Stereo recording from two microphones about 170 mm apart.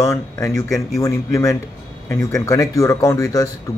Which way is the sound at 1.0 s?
20° left (ahead or behind).